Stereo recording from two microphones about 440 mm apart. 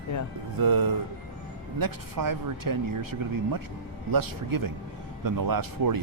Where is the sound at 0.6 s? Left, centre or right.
Right.